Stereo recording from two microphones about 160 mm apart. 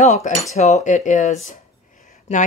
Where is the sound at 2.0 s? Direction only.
50° left (ahead or behind).